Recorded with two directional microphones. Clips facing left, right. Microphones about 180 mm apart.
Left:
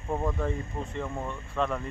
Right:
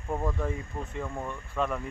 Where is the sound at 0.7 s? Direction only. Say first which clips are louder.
Left 2 dB; 15° left (ahead or behind).